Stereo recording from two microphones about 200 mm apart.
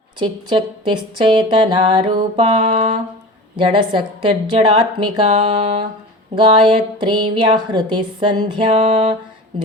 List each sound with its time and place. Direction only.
0.2 s a woman's voice: 25° right (ahead or behind)